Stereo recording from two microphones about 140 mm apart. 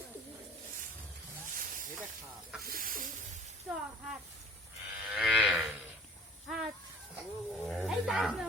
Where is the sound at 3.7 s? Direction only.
10° right (ahead or behind).